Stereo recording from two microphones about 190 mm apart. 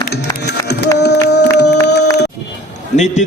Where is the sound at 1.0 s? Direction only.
65° left (ahead or behind).